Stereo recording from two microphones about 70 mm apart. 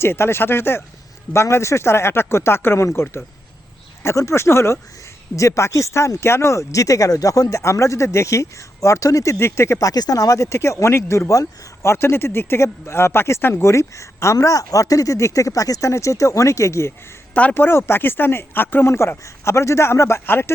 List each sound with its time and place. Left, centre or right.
0.0 s speech: left
7.6 s speech: left
9.3 s speech: left
9.7 s speech: left
17.5 s speech: left